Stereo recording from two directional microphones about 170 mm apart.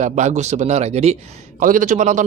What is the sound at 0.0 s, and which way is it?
Speech, 45° right (ahead or behind).